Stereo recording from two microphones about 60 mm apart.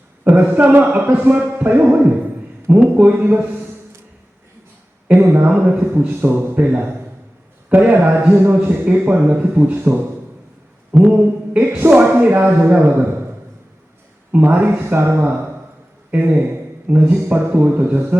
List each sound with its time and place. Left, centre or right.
0.5 s speech: right
5.2 s speech: right
10.9 s mantra: centre
11.2 s a man's voice: right
11.9 s speech: right
14.3 s speech: right
14.7 s speech: right
16.1 s speech: right